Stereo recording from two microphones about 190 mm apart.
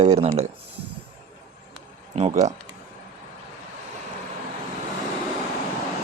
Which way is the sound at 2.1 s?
35° right (ahead or behind).